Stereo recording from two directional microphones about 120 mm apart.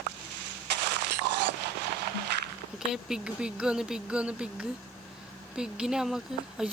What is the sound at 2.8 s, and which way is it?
Speech, 5° right (ahead or behind).